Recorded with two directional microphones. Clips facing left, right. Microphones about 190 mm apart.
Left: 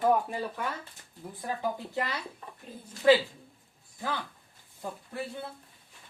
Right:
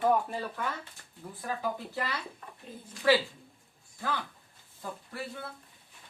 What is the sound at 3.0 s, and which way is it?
Speech, 20° left (ahead or behind).